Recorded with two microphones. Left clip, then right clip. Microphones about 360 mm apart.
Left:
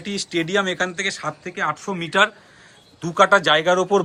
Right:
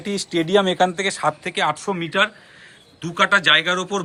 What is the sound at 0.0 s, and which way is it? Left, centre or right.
A man's voice, centre.